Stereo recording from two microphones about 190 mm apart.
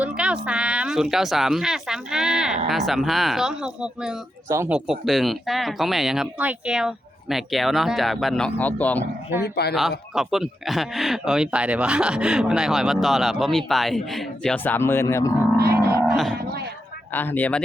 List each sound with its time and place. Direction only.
0.0 s a sound: 5° right (ahead or behind)
0.4 s speech: 5° right (ahead or behind)
4.9 s speech: centre (ahead or behind)
9.3 s speech: 10° right (ahead or behind); by 15.3 s 15° left (ahead or behind)
15.5 s music: 55° right (ahead or behind)
16.4 s a sound: 55° right (ahead or behind)
17.1 s speech: 10° left (ahead or behind)